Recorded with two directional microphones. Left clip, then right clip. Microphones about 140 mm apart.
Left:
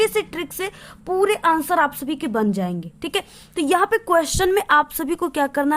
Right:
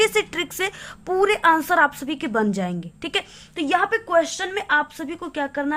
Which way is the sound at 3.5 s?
55° left (ahead or behind).